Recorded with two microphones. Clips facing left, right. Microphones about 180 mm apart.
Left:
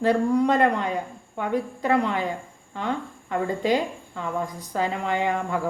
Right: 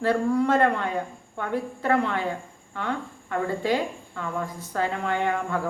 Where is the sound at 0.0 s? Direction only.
15° left (ahead or behind).